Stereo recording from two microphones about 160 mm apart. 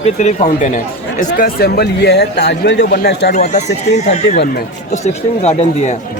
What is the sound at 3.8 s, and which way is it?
Speech, 45° left (ahead or behind).